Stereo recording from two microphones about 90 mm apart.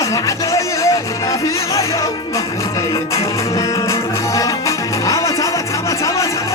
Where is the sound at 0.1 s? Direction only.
35° left (ahead or behind).